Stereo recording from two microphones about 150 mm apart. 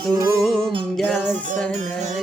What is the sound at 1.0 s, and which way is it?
Music, centre (ahead or behind).